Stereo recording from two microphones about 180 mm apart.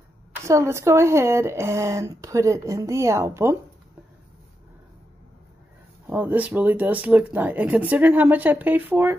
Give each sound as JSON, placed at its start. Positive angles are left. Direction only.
{"t": 0.5, "sound": "speech", "side_deg": -15}
{"t": 6.0, "sound": "speech", "side_deg": -10}